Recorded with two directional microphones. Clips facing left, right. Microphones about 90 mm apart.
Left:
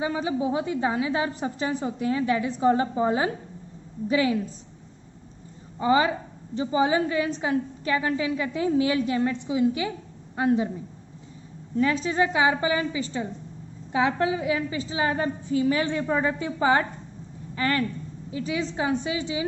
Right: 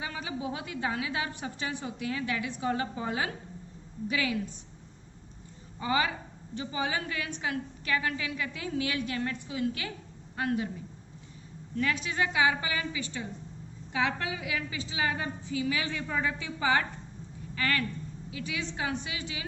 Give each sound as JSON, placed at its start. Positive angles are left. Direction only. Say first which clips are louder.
{"t": 0.0, "sound": "a woman's voice", "louder": "left 10 dB", "side_deg": 25}
{"t": 5.8, "sound": "a woman's voice", "louder": "left 8 dB", "side_deg": 30}
{"t": 11.8, "sound": "a woman's voice", "louder": "left 7 dB", "side_deg": 30}